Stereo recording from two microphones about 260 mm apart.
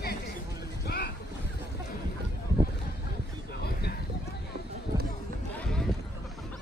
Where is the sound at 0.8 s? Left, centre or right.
Left.